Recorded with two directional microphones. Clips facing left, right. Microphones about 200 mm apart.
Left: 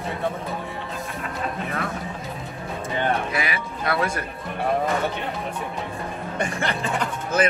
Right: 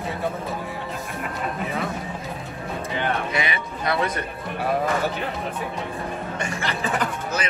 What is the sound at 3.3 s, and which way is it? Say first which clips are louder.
Music: right 1 dB; centre (ahead or behind).